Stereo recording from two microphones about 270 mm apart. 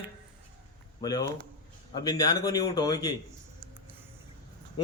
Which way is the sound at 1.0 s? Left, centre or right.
Centre.